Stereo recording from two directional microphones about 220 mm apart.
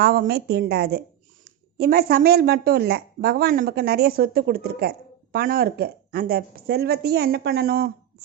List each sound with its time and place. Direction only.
0.0 s a woman's voice: 45° right (ahead or behind)